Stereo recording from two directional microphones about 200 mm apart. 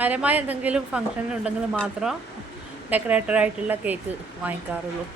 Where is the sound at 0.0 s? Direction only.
5° right (ahead or behind).